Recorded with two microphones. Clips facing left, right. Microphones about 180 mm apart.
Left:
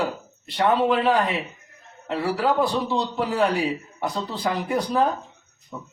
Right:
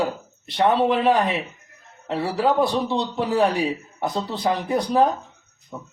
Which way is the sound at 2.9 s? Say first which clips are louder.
Right 1 dB; 25° right (ahead or behind).